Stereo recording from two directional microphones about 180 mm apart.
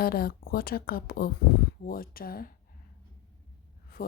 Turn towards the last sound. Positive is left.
turn(degrees=55)  # may be behind; listen again after turning